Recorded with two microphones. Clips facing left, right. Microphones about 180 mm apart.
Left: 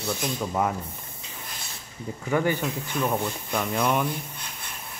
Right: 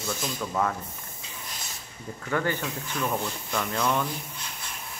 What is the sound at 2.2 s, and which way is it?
Speech, 15° left (ahead or behind).